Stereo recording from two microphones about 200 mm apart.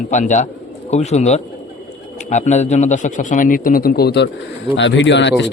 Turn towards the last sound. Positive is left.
turn(degrees=65)  # may be behind; listen again after turning